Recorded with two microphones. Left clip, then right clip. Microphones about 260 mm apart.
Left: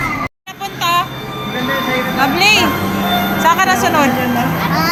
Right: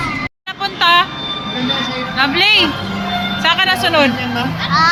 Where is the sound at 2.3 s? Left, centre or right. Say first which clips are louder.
Even; centre.